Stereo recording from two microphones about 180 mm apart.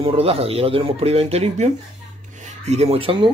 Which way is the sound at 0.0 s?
30° right (ahead or behind).